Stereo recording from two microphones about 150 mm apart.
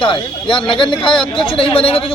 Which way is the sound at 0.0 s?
35° left (ahead or behind).